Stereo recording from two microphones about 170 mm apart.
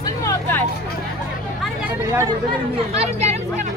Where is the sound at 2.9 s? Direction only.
40° right (ahead or behind).